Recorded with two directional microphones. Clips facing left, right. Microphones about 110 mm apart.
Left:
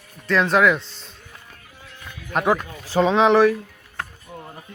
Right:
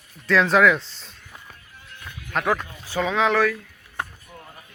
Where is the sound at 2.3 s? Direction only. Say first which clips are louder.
Left 3 dB; 15° left (ahead or behind).